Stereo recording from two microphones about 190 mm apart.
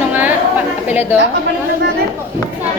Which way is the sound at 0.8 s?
10° right (ahead or behind).